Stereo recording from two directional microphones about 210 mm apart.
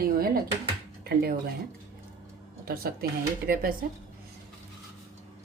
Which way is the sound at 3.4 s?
45° right (ahead or behind).